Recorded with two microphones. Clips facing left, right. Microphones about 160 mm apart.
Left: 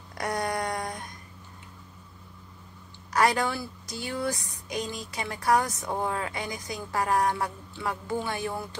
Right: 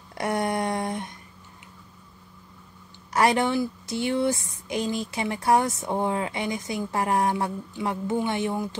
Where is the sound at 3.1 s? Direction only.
25° right (ahead or behind).